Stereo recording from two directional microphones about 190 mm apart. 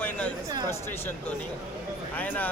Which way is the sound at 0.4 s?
20° right (ahead or behind).